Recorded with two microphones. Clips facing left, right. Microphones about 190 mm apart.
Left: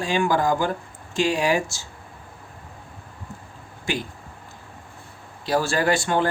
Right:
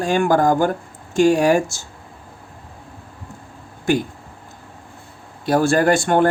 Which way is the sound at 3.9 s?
45° right (ahead or behind).